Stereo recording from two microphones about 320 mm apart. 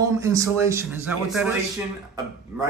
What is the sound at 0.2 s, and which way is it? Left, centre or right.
Speech, centre.